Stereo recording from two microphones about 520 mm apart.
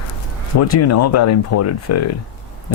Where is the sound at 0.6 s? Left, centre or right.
Left.